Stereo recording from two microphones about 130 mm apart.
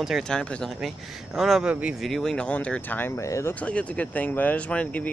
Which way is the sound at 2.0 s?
Centre (ahead or behind).